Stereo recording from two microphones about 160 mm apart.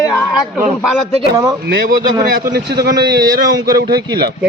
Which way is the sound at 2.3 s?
75° right (ahead or behind).